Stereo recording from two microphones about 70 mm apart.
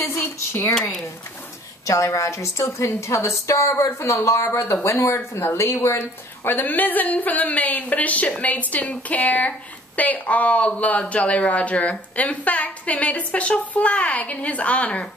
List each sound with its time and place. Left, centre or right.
0.1 s a sound: left
1.9 s a woman's voice: left
6.4 s speech: left